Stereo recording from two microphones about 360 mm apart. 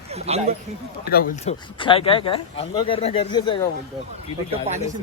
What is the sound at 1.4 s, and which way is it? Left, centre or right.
Speech, centre.